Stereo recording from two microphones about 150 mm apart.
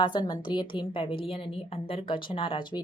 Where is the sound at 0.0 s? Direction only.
30° left (ahead or behind).